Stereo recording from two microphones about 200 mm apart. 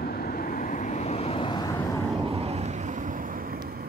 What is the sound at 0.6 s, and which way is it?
Vehicle, 40° left (ahead or behind).